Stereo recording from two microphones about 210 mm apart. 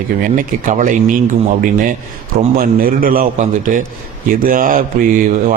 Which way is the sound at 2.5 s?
40° right (ahead or behind).